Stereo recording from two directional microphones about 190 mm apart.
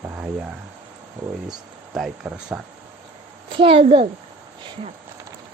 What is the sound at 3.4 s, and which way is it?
Wild animals, 30° right (ahead or behind).